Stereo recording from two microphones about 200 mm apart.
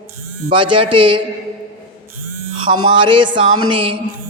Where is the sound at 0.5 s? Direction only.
25° right (ahead or behind).